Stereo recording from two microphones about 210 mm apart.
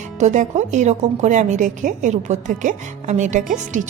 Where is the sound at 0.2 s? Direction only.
35° right (ahead or behind).